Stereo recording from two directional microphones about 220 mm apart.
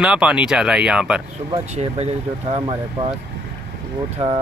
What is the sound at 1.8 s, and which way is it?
Speech, 30° right (ahead or behind).